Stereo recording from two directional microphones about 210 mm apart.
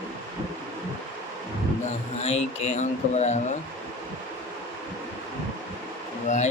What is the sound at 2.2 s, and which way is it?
Speech, 30° left (ahead or behind).